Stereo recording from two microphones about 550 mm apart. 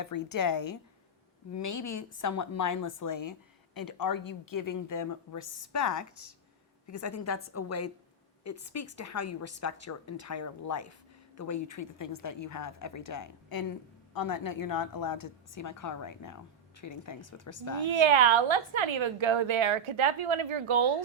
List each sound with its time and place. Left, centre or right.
0.1 s a woman's voice: left
17.8 s a woman's voice: right